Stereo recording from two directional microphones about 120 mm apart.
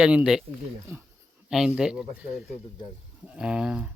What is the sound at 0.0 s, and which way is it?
Speech, 10° right (ahead or behind).